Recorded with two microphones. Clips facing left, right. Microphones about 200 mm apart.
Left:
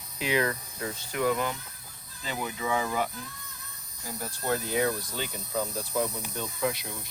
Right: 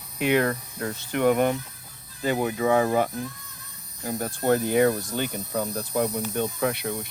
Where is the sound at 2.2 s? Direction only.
50° right (ahead or behind).